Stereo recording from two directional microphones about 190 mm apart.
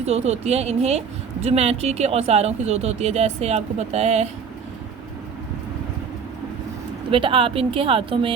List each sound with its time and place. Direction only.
0.0 s speech: 35° right (ahead or behind)
7.1 s speech: 30° right (ahead or behind)